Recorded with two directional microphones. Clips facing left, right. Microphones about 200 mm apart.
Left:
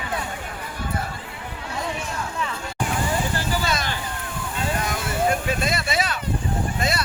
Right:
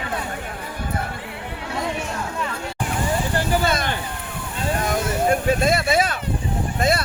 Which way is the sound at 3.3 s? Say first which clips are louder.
Right 4 dB; 55° right (ahead or behind).